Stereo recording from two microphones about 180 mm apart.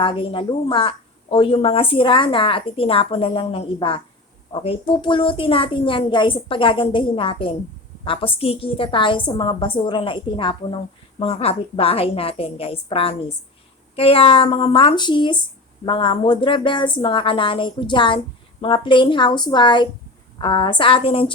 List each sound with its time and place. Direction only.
0.0 s a woman's voice: 30° left (ahead or behind)